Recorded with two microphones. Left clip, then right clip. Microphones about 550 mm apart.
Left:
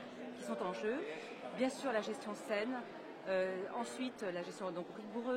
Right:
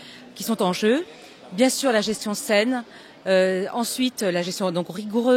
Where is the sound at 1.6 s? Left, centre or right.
Right.